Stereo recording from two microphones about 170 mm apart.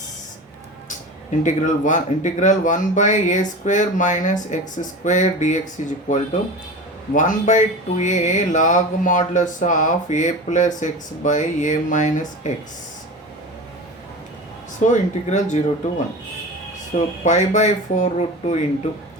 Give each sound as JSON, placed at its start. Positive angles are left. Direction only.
{"t": 1.5, "sound": "speech", "side_deg": 45}
{"t": 14.8, "sound": "speech", "side_deg": 45}
{"t": 16.9, "sound": "speech", "side_deg": 45}